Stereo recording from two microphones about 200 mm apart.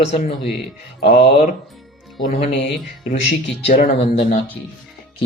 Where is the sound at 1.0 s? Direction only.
55° left (ahead or behind).